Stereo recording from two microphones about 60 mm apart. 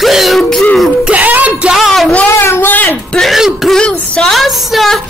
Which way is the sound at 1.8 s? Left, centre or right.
Centre.